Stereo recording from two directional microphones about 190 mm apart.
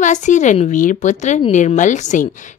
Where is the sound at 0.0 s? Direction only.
40° left (ahead or behind).